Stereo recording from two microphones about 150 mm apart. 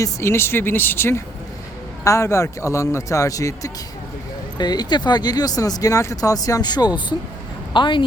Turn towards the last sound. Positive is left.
turn(degrees=30)  # may be behind; listen again after turning